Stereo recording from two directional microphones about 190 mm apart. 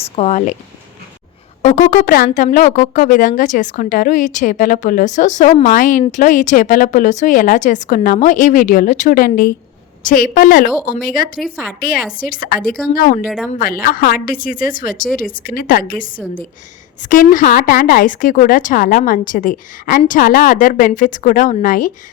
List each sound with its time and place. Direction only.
0.0 s speech: 35° left (ahead or behind)
1.6 s a woman's voice: 40° left (ahead or behind)
11.4 s a woman's voice: 5° right (ahead or behind)
12.1 s a woman's voice: 50° left (ahead or behind)
13.2 s a woman's voice: centre (ahead or behind)
13.5 s a woman's voice: 50° left (ahead or behind)